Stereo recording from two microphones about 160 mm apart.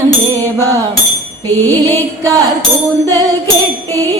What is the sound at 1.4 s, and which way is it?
Music, 15° left (ahead or behind).